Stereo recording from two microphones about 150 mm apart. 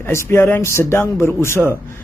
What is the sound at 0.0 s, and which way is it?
Speech, 15° left (ahead or behind).